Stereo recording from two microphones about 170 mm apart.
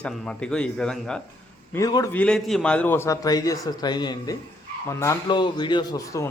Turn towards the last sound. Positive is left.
turn(degrees=20)  # may be behind; listen again after turning